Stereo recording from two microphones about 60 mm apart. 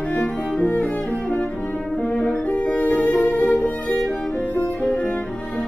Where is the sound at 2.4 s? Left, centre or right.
Left.